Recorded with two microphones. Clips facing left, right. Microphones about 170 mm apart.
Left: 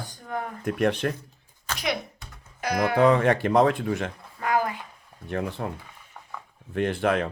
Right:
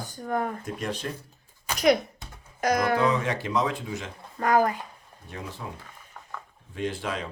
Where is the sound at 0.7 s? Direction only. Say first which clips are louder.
Left 8 dB; 60° left (ahead or behind).